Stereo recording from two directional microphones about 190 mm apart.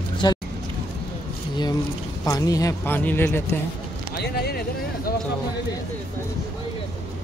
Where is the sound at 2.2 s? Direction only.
20° left (ahead or behind).